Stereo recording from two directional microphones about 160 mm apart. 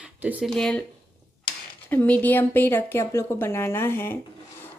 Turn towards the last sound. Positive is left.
turn(degrees=15)  # may be behind; listen again after turning